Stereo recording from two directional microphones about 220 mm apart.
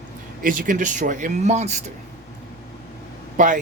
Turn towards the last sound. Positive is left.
turn(degrees=-35)  # may be behind; listen again after turning